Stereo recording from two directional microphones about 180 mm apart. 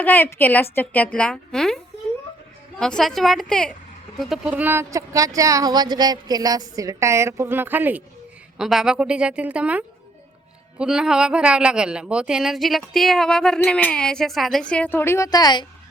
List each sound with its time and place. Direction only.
0.0 s a woman's voice: 10° left (ahead or behind)